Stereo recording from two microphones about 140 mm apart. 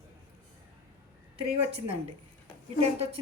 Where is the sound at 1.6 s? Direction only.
45° right (ahead or behind).